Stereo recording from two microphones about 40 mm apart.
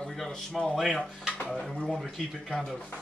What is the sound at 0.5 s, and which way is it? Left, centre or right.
Speech, centre.